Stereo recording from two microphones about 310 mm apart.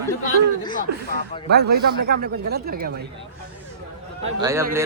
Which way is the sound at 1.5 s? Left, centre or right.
Right.